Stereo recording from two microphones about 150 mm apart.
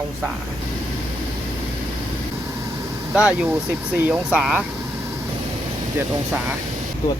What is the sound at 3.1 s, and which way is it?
Speech, 5° right (ahead or behind).